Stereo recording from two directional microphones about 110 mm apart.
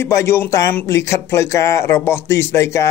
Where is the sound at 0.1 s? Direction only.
25° left (ahead or behind).